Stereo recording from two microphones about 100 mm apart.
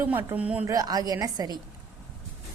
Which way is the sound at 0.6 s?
35° right (ahead or behind).